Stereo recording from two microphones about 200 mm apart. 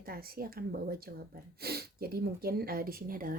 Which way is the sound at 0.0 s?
50° right (ahead or behind).